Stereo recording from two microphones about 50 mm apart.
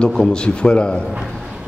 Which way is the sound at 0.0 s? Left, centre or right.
Centre.